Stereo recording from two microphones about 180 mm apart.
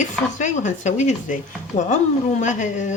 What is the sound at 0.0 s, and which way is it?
Speech, 45° left (ahead or behind).